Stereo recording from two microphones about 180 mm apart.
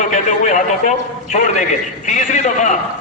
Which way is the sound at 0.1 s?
45° left (ahead or behind).